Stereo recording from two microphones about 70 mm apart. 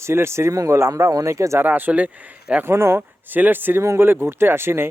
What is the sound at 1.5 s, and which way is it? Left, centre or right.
Speech, right.